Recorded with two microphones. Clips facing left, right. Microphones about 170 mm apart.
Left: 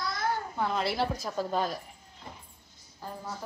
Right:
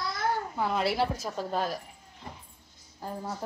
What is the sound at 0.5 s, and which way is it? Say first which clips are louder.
A woman's voice: right 2 dB; 5° right (ahead or behind).